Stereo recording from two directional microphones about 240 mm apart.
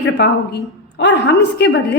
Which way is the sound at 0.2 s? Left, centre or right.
Left.